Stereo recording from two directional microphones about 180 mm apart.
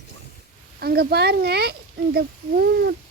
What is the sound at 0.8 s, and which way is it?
Speech, 60° right (ahead or behind).